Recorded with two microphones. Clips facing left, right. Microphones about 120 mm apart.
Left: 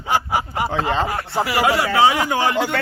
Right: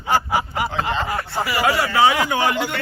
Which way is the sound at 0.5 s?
40° left (ahead or behind).